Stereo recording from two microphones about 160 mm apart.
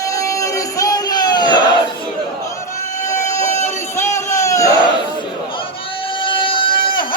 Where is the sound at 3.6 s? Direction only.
15° left (ahead or behind).